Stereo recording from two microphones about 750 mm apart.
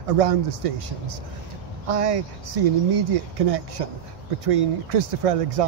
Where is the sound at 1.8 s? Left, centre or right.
Right.